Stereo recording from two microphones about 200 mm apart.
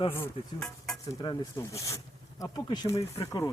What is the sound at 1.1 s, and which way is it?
Speech, 15° left (ahead or behind).